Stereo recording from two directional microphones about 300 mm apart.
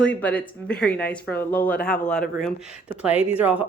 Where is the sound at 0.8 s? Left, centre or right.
Left.